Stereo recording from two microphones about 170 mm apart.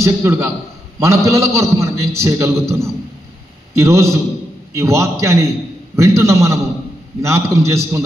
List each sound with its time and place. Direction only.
0.0 s a man's voice: 15° right (ahead or behind)